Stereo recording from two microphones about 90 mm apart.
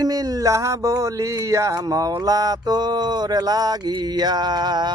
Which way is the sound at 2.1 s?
45° right (ahead or behind).